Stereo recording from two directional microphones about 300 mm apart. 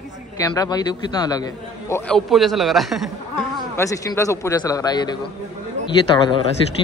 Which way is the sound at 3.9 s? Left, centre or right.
Centre.